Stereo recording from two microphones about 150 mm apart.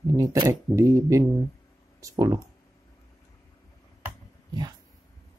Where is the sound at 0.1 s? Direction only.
20° right (ahead or behind).